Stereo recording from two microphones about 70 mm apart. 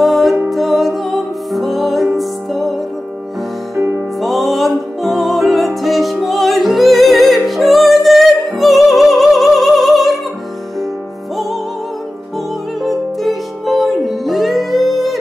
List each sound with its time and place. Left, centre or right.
0.0 s music: centre
3.7 s music: right
4.2 s music: centre
12.8 s music: centre